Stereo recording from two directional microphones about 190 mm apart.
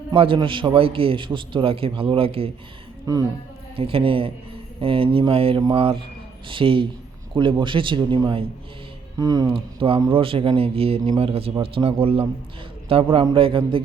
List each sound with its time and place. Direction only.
0.1 s speech: 25° right (ahead or behind)
3.8 s speech: 30° right (ahead or behind)